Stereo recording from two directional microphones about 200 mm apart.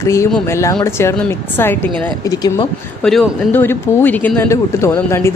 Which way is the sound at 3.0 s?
Centre (ahead or behind).